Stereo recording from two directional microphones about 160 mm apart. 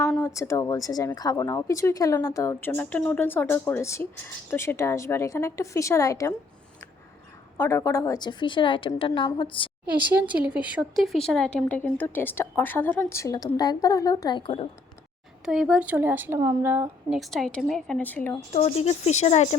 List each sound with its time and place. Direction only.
0.2 s speech: 20° left (ahead or behind)
7.6 s speech: 20° left (ahead or behind)
9.9 s speech: 10° right (ahead or behind); by 14.7 s 30° left (ahead or behind)
15.4 s speech: 5° right (ahead or behind)
17.2 s a woman's voice: centre (ahead or behind)
18.5 s speech: 40° left (ahead or behind)